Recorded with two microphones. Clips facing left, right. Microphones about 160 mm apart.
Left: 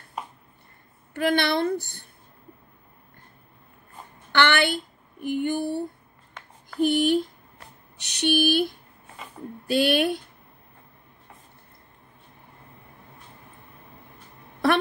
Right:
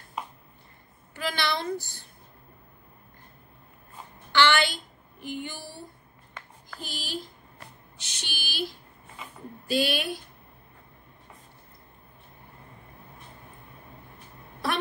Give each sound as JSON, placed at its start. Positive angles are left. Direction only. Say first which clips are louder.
{"t": 1.1, "sound": "a woman's voice", "louder": "left 7 dB", "side_deg": 55}
{"t": 4.3, "sound": "a woman's voice", "louder": "left 2 dB", "side_deg": 55}
{"t": 5.2, "sound": "a sound", "louder": "left 11 dB", "side_deg": 55}
{"t": 6.8, "sound": "a woman's voice", "louder": "left 17 dB", "side_deg": 60}